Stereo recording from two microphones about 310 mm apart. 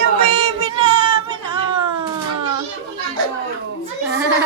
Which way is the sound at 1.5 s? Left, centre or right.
Centre.